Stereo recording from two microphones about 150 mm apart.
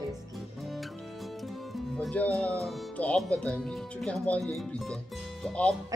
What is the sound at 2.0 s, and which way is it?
Speech, 10° left (ahead or behind).